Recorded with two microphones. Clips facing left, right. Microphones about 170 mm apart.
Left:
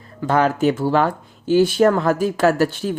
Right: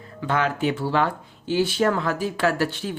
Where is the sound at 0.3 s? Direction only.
40° left (ahead or behind).